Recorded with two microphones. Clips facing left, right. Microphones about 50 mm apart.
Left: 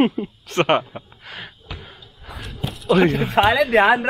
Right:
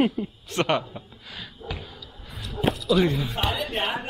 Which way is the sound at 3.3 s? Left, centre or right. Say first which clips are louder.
Left 12 dB; left.